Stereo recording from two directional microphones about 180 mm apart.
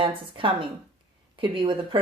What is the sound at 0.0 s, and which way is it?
Speech, 30° right (ahead or behind).